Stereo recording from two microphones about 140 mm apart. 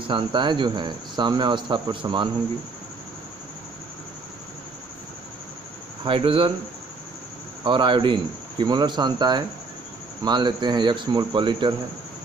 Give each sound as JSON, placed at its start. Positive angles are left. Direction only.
{"t": 0.1, "sound": "speech", "side_deg": -35}
{"t": 6.0, "sound": "speech", "side_deg": -40}
{"t": 7.6, "sound": "speech", "side_deg": -35}